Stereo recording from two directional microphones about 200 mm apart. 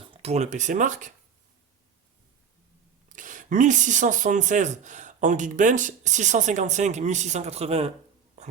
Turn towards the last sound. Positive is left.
turn(degrees=-30)  # may be behind; listen again after turning